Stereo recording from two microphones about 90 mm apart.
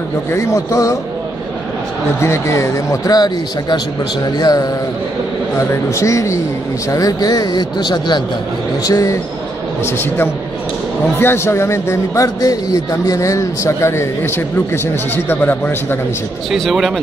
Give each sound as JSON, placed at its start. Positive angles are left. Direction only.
{"t": 0.3, "sound": "a man's voice", "side_deg": 35}
{"t": 2.2, "sound": "a man's voice", "side_deg": 30}
{"t": 3.1, "sound": "speech", "side_deg": 50}
{"t": 5.6, "sound": "a man's voice", "side_deg": 35}
{"t": 8.8, "sound": "a man's voice", "side_deg": 40}
{"t": 9.8, "sound": "a man's voice", "side_deg": 25}
{"t": 16.5, "sound": "speech", "side_deg": 0}